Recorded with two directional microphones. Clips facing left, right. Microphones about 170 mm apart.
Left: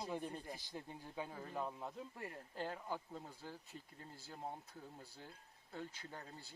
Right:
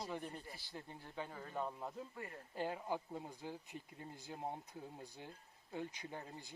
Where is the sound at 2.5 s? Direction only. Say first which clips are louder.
Right 4 dB; 10° right (ahead or behind).